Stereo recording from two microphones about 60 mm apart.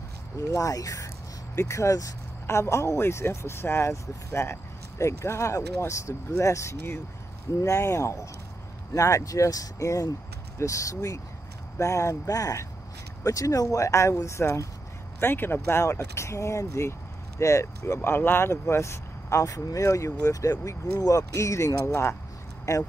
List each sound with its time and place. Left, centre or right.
0.5 s speech: left
1.5 s speech: left
2.4 s speech: left
15.1 s speech: left
16.2 s speech: left
22.7 s speech: left